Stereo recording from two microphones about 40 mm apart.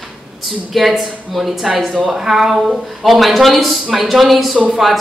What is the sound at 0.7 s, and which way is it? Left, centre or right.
Speech, centre.